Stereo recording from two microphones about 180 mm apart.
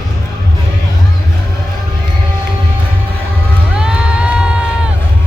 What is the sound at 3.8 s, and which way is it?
Crowd, 5° right (ahead or behind).